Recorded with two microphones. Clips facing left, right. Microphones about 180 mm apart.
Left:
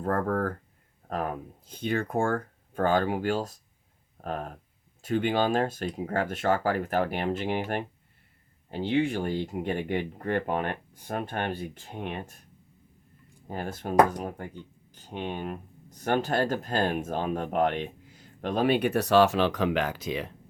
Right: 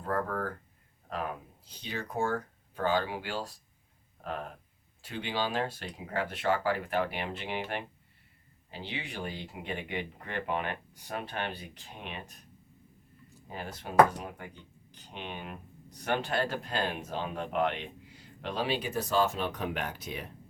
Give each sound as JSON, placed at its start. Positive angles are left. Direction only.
{"t": 0.0, "sound": "speech", "side_deg": 45}
{"t": 13.5, "sound": "speech", "side_deg": 50}